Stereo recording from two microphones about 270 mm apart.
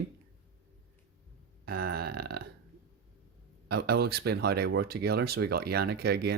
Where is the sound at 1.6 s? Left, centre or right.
Right.